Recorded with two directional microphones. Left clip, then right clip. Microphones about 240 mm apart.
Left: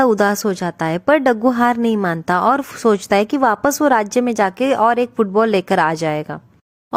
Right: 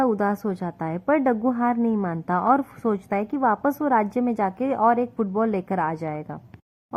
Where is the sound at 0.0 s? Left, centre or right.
Left.